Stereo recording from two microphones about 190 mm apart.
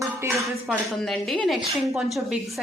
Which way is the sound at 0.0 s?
15° right (ahead or behind).